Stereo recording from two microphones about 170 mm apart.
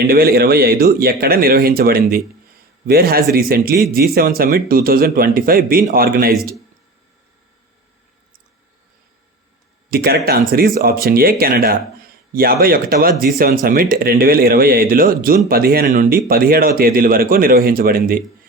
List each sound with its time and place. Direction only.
0.1 s speech: 65° right (ahead or behind)
9.9 s speech: 65° right (ahead or behind)